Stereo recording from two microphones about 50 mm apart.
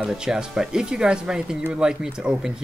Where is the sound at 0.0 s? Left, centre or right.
Centre.